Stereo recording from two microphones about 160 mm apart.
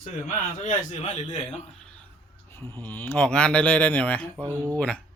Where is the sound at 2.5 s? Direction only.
15° left (ahead or behind).